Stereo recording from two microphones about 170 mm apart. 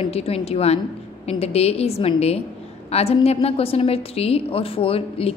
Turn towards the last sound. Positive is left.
turn(degrees=35)  # may be behind; listen again after turning